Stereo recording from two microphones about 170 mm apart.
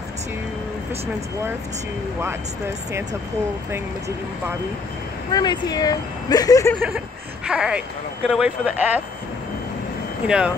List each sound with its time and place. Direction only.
5.3 s speech: 25° left (ahead or behind)
7.4 s speech: 5° right (ahead or behind)
10.2 s speech: 5° right (ahead or behind)